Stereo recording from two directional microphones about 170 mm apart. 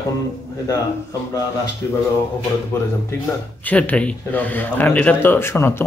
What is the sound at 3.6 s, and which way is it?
Speech, 10° left (ahead or behind).